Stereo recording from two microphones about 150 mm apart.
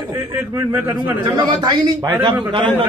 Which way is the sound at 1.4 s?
30° right (ahead or behind).